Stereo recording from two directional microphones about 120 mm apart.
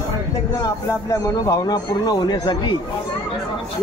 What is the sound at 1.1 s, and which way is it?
A man's voice, 30° left (ahead or behind).